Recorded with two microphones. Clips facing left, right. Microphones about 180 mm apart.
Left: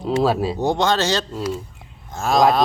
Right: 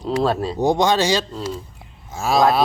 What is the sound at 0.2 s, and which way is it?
Speech, 5° left (ahead or behind).